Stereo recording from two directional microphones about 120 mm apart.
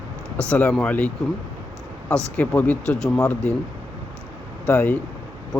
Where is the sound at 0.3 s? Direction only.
10° left (ahead or behind).